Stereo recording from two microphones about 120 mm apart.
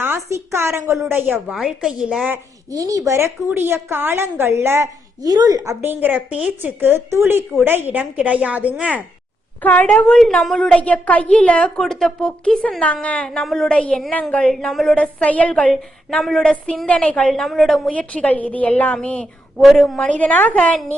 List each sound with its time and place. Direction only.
0.0 s a woman's voice: 20° right (ahead or behind)
1.5 s a woman's voice: 5° right (ahead or behind)
2.7 s a woman's voice: 30° right (ahead or behind)
5.2 s speech: 30° right (ahead or behind); by 9.0 s 10° right (ahead or behind)
9.6 s a woman's voice: 10° left (ahead or behind)